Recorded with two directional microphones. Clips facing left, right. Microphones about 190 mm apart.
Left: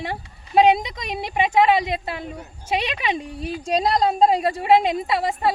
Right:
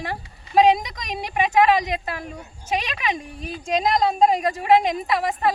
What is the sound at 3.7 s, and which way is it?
A woman's voice, 35° left (ahead or behind).